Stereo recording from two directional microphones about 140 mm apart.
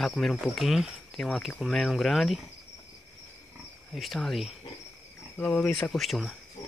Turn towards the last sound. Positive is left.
turn(degrees=0)  # may be behind; listen again after turning